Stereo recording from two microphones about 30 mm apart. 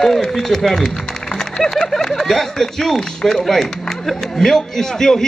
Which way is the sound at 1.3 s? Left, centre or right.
Centre.